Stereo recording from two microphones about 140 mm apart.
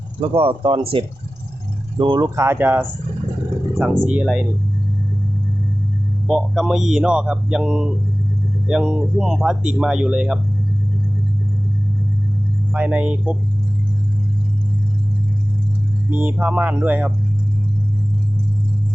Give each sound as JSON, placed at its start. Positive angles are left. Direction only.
{"t": 0.2, "sound": "speech", "side_deg": -40}
{"t": 2.4, "sound": "speech", "side_deg": -15}
{"t": 4.0, "sound": "speech", "side_deg": -10}
{"t": 6.2, "sound": "speech", "side_deg": 0}
{"t": 12.7, "sound": "speech", "side_deg": -10}
{"t": 16.0, "sound": "speech", "side_deg": -10}